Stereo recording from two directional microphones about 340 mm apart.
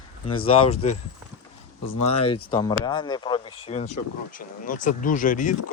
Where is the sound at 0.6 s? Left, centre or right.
Centre.